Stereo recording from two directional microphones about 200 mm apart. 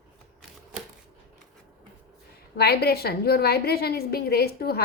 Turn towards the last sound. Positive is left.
turn(degrees=50)  # may be behind; listen again after turning